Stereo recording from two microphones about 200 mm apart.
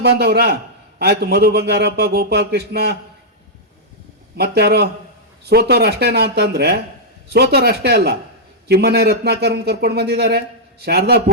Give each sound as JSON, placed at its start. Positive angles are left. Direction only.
{"t": 0.0, "sound": "speech", "side_deg": -55}
{"t": 4.4, "sound": "speech", "side_deg": -55}